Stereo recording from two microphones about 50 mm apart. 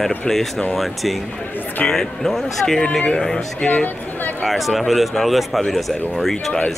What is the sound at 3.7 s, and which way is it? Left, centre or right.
Speech, left.